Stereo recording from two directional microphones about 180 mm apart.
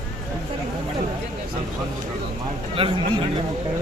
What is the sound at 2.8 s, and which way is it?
Speech, 30° right (ahead or behind).